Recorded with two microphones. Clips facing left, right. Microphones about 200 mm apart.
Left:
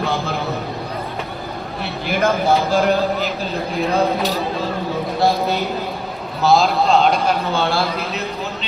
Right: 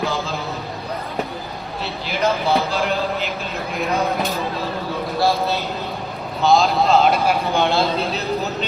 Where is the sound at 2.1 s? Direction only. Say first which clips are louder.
Left 3 dB; 50° left (ahead or behind).